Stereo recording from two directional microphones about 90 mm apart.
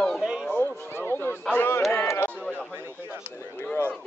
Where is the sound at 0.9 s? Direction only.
25° left (ahead or behind).